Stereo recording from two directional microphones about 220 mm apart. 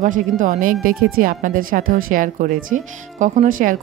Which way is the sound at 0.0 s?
35° right (ahead or behind).